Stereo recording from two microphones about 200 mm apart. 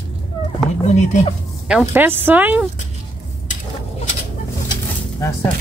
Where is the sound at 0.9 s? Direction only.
35° left (ahead or behind).